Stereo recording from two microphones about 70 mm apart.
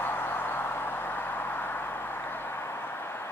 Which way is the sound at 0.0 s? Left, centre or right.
Left.